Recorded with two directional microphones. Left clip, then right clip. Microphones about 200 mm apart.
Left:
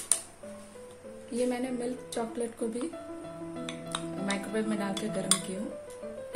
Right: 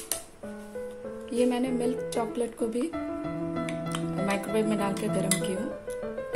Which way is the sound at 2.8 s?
Centre (ahead or behind).